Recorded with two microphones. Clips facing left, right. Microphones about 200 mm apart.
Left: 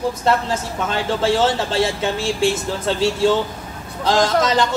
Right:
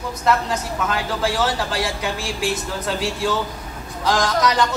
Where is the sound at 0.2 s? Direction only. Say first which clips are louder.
Right 4 dB; 30° left (ahead or behind).